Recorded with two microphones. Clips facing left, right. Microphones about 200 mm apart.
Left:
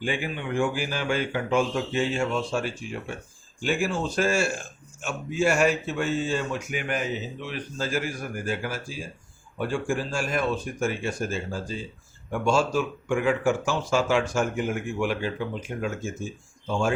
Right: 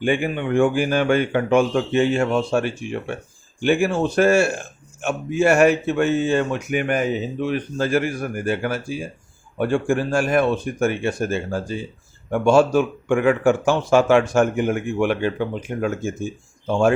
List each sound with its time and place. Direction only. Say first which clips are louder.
0.0 s speech: right 8 dB; 60° right (ahead or behind)